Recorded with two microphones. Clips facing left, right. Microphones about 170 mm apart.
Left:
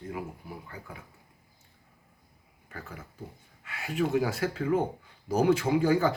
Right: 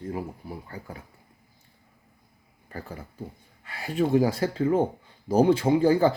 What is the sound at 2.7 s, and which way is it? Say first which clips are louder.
Speech: right 5 dB; 35° right (ahead or behind).